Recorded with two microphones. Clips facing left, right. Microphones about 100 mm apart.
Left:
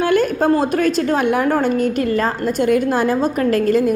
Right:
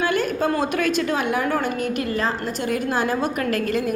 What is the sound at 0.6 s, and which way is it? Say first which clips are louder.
A woman's voice: left 5 dB; 40° left (ahead or behind).